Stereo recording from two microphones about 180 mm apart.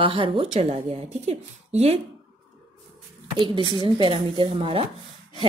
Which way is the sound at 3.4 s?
25° right (ahead or behind).